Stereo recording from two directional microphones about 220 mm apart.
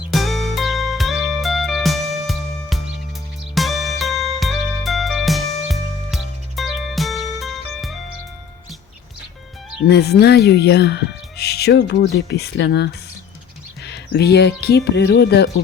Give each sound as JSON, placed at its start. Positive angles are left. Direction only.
{"t": 0.1, "sound": "music", "side_deg": 0}
{"t": 9.9, "sound": "speech", "side_deg": 50}